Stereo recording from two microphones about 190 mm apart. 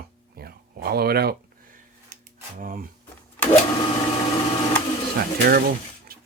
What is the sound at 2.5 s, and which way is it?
Speech, 45° right (ahead or behind).